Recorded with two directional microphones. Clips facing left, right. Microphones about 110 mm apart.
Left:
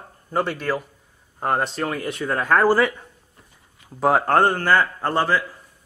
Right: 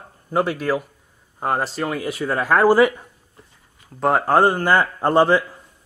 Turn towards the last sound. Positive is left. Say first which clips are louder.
# right 6 dB
turn(degrees=-20)  # may be behind; listen again after turning